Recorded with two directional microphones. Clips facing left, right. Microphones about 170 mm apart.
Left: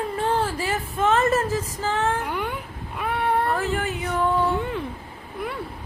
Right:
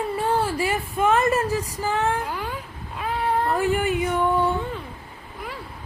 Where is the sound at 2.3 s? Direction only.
65° left (ahead or behind).